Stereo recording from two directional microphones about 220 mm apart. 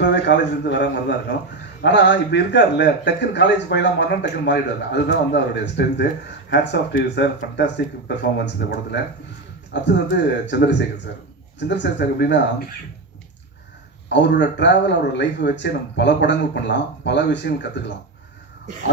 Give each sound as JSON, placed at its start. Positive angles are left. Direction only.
{"t": 0.0, "sound": "a man's voice", "side_deg": 50}
{"t": 14.0, "sound": "a man's voice", "side_deg": 50}